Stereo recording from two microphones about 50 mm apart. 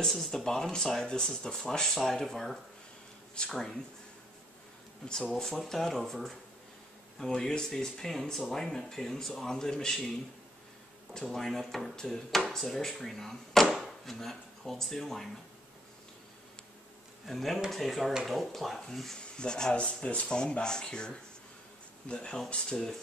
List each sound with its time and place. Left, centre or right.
0.0 s speech: centre
5.3 s speech: centre
7.2 s speech: centre
11.1 s speech: centre
17.3 s speech: centre
19.1 s speech: centre